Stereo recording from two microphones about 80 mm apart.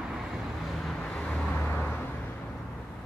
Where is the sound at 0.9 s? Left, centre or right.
Centre.